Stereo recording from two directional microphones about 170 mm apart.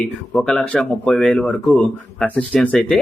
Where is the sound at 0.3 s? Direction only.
5° left (ahead or behind).